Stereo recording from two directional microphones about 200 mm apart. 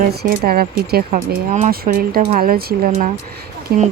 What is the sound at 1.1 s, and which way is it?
Speech, 35° right (ahead or behind).